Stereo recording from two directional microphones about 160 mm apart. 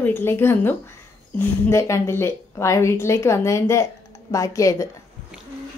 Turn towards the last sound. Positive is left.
turn(degrees=20)  # may be behind; listen again after turning